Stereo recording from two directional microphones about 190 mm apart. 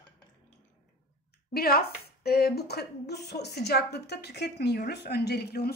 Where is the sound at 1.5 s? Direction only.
55° left (ahead or behind).